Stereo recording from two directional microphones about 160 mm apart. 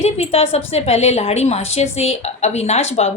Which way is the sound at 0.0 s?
40° left (ahead or behind).